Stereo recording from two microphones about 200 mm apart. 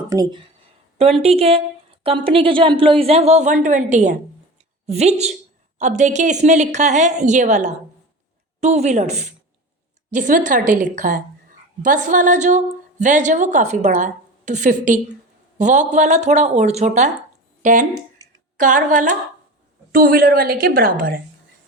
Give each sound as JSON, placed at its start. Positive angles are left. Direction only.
{"t": 0.1, "sound": "a woman's voice", "side_deg": -20}